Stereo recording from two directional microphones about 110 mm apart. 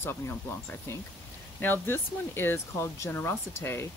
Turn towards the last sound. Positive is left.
turn(degrees=25)  # may be behind; listen again after turning